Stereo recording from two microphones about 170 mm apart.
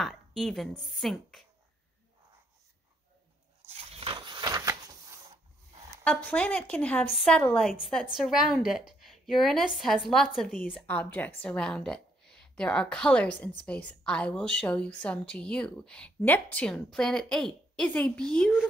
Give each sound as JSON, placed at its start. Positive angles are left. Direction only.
{"t": 0.0, "sound": "speech", "side_deg": 0}
{"t": 3.7, "sound": "a sound", "side_deg": -35}
{"t": 6.0, "sound": "a woman's voice", "side_deg": 10}
{"t": 10.9, "sound": "a woman's voice", "side_deg": 10}